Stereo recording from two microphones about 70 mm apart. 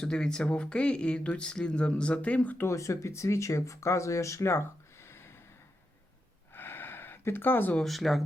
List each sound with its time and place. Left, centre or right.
0.0 s speech: centre
2.6 s speech: left
6.5 s a sound: left
7.8 s speech: centre